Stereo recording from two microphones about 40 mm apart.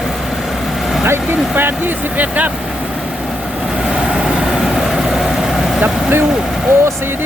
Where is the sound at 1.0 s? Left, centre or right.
Right.